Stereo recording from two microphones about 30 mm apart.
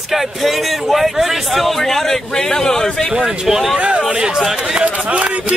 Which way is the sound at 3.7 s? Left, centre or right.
Right.